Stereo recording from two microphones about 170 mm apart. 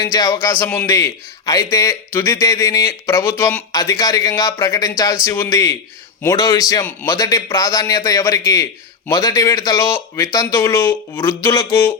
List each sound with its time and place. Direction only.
0.0 s a man's voice: 20° left (ahead or behind)